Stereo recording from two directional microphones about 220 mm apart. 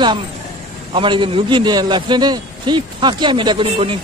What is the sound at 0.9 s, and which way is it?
A man's voice, 20° right (ahead or behind).